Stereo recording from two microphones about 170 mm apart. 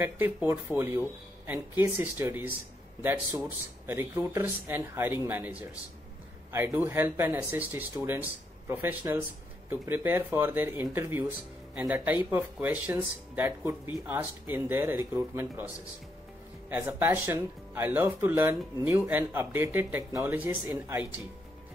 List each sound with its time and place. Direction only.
0.0 s speech: 15° right (ahead or behind)